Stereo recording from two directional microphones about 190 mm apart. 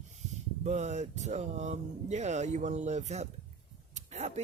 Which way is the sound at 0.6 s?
35° right (ahead or behind).